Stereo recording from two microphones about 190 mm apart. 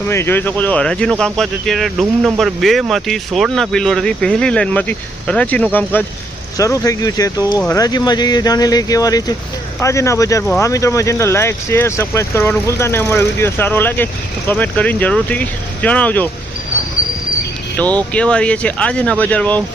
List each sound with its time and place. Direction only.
0.1 s speech: 10° left (ahead or behind)
17.8 s speech: 10° left (ahead or behind)